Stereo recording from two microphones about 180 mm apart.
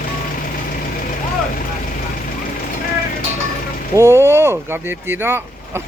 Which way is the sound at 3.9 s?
15° right (ahead or behind).